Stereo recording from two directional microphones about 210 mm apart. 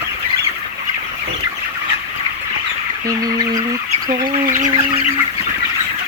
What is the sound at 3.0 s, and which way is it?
Speech, 15° right (ahead or behind).